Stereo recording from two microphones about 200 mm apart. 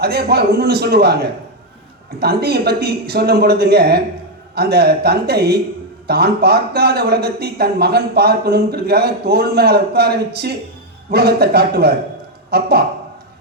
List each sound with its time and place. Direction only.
0.0 s speech: 50° right (ahead or behind)